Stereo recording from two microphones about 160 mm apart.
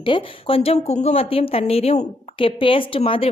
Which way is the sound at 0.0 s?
35° left (ahead or behind).